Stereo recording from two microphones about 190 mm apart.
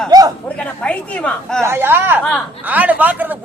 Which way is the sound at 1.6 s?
10° right (ahead or behind).